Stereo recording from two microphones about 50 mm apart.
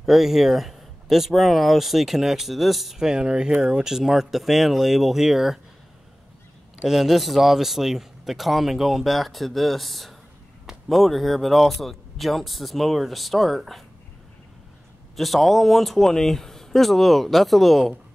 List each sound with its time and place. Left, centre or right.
0.0 s speech: centre
6.8 s speech: centre
15.1 s speech: centre